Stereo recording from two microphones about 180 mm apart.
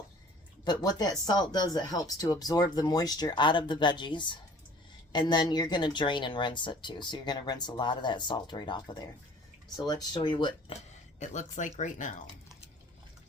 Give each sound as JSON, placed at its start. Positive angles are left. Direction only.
{"t": 0.6, "sound": "speech", "side_deg": 20}
{"t": 11.2, "sound": "speech", "side_deg": 40}